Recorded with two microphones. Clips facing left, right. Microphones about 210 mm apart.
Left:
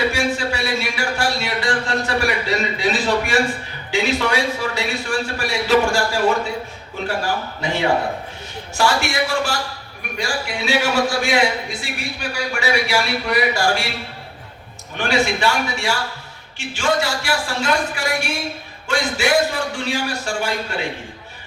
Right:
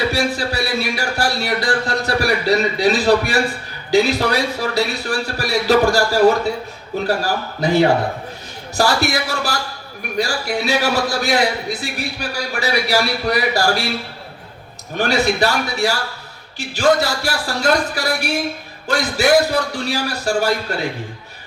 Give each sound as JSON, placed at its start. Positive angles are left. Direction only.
{"t": 0.1, "sound": "a sound", "side_deg": -35}
{"t": 3.9, "sound": "a man's voice", "side_deg": -40}
{"t": 7.6, "sound": "a man's voice", "side_deg": -40}
{"t": 14.9, "sound": "a man's voice", "side_deg": -40}